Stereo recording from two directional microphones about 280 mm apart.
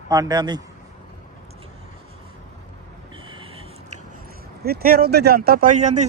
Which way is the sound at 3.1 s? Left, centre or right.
Centre.